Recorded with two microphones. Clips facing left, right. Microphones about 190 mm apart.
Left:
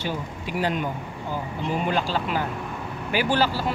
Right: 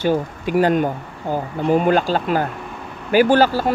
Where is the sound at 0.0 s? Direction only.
50° right (ahead or behind).